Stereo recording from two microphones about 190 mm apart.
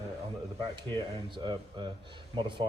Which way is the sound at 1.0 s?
25° right (ahead or behind).